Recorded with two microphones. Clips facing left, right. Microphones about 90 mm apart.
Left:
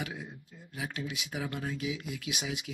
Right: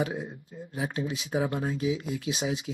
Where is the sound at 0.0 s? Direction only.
35° right (ahead or behind).